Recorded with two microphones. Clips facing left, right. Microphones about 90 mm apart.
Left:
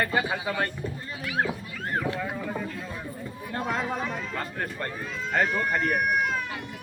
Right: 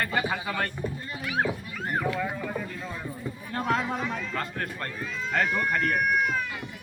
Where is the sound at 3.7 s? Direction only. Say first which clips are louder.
Right 2 dB; 10° left (ahead or behind).